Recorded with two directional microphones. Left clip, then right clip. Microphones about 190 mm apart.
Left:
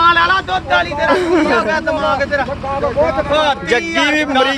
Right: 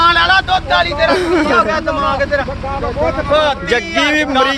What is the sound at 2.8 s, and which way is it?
Speech, 35° left (ahead or behind).